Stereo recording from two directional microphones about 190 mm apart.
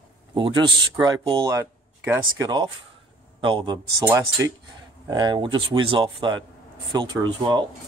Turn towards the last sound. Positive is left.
turn(degrees=-25)  # may be behind; listen again after turning